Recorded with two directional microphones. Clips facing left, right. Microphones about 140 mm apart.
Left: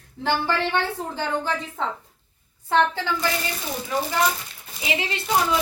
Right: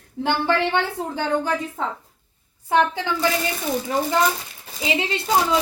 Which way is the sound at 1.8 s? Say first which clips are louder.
Right 1 dB; 5° right (ahead or behind).